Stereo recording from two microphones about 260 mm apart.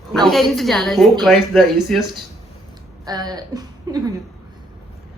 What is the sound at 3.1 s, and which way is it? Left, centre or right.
Speech, centre.